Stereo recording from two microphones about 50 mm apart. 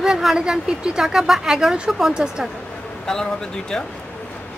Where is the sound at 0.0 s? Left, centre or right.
Centre.